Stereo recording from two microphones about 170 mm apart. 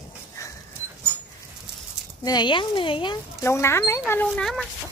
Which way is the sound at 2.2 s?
25° left (ahead or behind).